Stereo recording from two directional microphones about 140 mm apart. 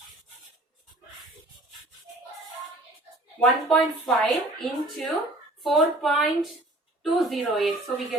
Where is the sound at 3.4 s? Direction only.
Centre (ahead or behind).